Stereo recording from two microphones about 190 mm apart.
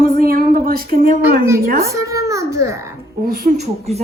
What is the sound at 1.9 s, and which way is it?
Speech, 15° right (ahead or behind).